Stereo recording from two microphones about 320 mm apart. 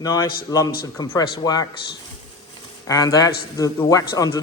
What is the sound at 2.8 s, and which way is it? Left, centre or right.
A man's voice, centre.